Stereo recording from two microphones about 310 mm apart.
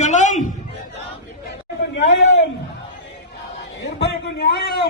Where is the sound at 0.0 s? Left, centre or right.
Left.